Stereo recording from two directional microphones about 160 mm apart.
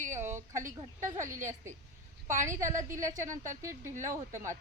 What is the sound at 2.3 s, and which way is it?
A woman's voice, 20° right (ahead or behind).